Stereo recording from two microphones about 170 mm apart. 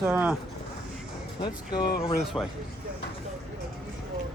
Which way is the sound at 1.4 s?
25° left (ahead or behind).